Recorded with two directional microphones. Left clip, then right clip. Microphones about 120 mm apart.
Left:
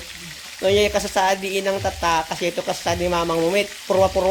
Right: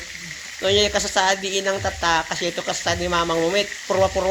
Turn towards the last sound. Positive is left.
turn(degrees=5)  # may be behind; listen again after turning